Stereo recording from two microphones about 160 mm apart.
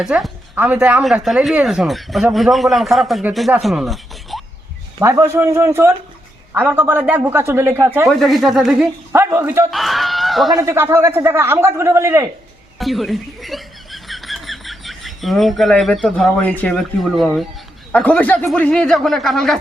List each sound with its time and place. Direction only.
0.0 s speech: 5° right (ahead or behind)
3.6 s a sound: centre (ahead or behind)
4.9 s a man's voice: 20° right (ahead or behind)
8.0 s speech: centre (ahead or behind)
9.1 s a man's voice: 15° right (ahead or behind)
9.6 s speech: centre (ahead or behind)
10.5 s a man's voice: 15° right (ahead or behind)
12.8 s speech: centre (ahead or behind)